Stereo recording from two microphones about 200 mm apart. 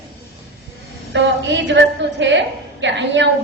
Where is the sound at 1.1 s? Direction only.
65° right (ahead or behind).